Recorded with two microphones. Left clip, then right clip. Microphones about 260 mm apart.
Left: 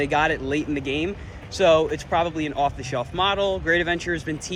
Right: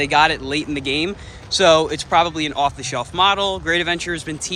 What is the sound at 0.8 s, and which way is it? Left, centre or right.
Speech, right.